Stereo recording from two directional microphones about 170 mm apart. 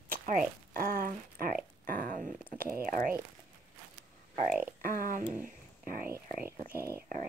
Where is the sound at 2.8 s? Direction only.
55° right (ahead or behind).